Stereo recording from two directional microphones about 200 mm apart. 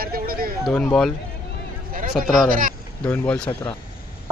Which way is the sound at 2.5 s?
45° right (ahead or behind).